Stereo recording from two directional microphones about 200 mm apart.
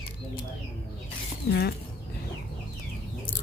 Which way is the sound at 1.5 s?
55° left (ahead or behind).